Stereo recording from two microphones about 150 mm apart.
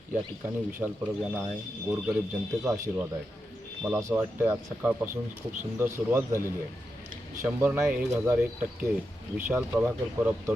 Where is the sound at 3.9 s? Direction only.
15° right (ahead or behind).